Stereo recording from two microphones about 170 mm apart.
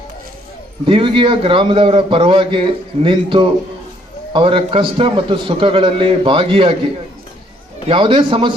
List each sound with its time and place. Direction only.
0.9 s a man's voice: 30° right (ahead or behind)
7.9 s a man's voice: 30° right (ahead or behind)